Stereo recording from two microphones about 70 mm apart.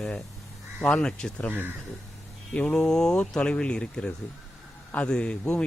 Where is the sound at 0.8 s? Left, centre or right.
Centre.